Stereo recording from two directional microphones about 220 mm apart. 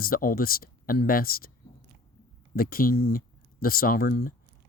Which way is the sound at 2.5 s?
40° left (ahead or behind).